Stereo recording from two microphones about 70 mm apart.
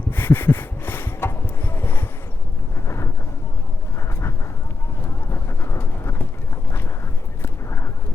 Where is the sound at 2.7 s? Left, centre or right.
Left.